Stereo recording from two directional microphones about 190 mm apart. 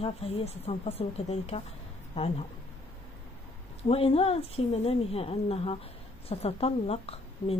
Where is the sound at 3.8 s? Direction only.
30° left (ahead or behind).